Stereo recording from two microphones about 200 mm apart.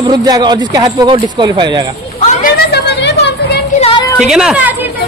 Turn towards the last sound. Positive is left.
turn(degrees=-10)  # may be behind; listen again after turning